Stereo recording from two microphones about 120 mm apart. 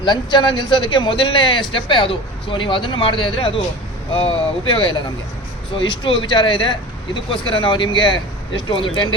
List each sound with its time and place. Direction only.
0.0 s a man's voice: 40° left (ahead or behind)